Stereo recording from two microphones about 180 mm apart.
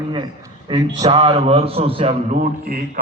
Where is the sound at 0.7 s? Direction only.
25° right (ahead or behind).